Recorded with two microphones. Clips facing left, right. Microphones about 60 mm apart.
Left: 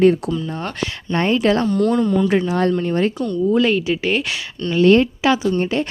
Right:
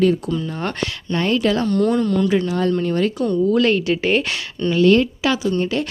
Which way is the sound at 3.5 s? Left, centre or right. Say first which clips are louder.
Even; centre.